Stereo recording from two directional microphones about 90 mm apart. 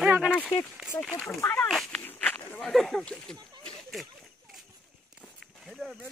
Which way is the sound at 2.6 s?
5° left (ahead or behind).